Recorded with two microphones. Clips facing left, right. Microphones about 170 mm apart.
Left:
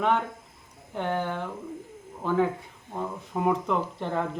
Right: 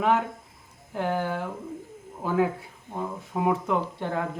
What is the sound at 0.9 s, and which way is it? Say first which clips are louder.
Speech: right 1 dB; 5° right (ahead or behind).